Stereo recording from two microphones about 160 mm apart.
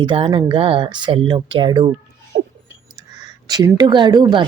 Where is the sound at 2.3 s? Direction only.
70° right (ahead or behind).